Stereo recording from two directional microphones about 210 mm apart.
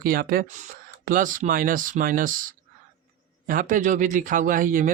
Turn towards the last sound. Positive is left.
turn(degrees=-40)  # may be behind; listen again after turning